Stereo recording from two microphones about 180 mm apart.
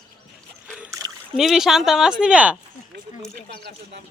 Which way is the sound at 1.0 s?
20° right (ahead or behind).